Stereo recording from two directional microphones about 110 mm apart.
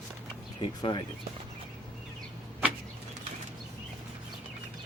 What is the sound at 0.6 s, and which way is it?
Speech, 45° left (ahead or behind).